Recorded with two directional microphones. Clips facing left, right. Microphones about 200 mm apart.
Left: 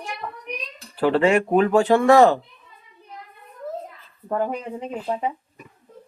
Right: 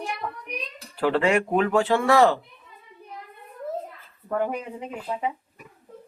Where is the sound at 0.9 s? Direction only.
30° left (ahead or behind).